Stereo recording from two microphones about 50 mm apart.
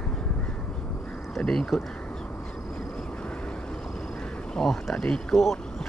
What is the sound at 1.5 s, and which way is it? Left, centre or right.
Speech, centre.